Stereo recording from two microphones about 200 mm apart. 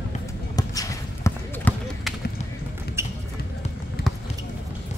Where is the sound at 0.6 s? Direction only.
15° left (ahead or behind).